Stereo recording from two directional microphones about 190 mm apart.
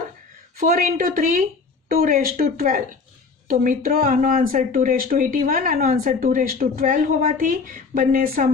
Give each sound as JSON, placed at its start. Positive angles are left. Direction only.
{"t": 0.6, "sound": "speech", "side_deg": -45}